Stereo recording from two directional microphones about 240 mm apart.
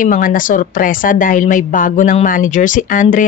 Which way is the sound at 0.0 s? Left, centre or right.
Left.